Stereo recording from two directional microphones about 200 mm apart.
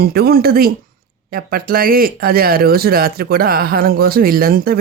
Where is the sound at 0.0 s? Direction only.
50° right (ahead or behind).